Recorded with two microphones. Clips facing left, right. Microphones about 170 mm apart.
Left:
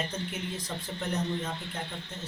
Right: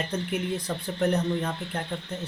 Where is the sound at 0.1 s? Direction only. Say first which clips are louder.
Right 7 dB; 60° right (ahead or behind).